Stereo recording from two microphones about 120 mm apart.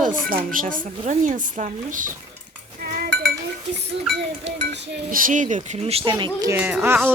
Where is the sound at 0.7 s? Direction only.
90° right.